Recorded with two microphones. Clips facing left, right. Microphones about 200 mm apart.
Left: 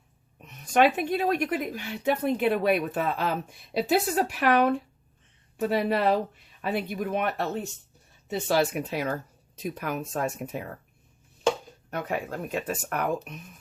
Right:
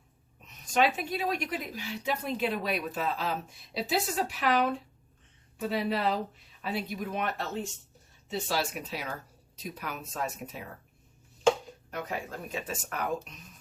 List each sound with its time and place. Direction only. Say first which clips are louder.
0.4 s a woman's voice: left 5 dB; 60° left (ahead or behind)
11.9 s a woman's voice: left 5 dB; 60° left (ahead or behind)